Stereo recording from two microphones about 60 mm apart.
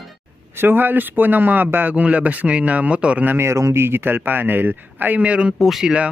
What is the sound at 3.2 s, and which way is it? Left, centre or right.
Speech, right.